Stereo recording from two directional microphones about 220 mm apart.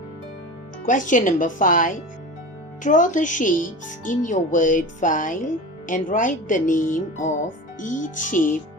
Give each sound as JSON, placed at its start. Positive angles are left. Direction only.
{"t": 0.9, "sound": "speech", "side_deg": 35}